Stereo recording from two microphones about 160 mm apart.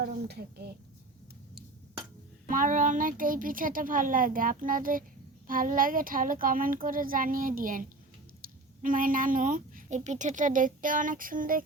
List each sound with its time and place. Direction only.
0.0 s speech: 85° right
2.5 s speech: 55° right (ahead or behind)